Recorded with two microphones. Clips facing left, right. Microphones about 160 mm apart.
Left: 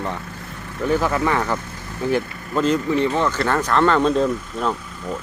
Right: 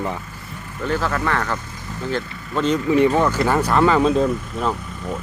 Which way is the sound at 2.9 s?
15° right (ahead or behind).